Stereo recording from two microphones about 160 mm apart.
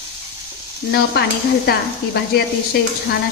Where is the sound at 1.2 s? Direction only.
90° left.